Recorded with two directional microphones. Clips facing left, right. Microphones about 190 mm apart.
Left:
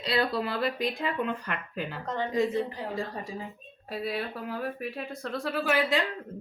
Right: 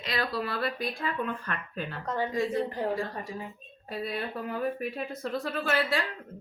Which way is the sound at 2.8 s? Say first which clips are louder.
Right 6 dB; 50° right (ahead or behind).